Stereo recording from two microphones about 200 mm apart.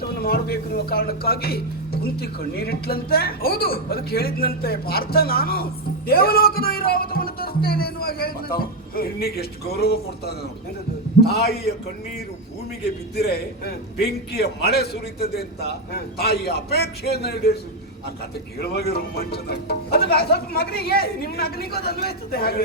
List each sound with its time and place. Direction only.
0.2 s speech: 50° left (ahead or behind)
13.1 s speech: 50° left (ahead or behind)
18.6 s speech: 50° left (ahead or behind)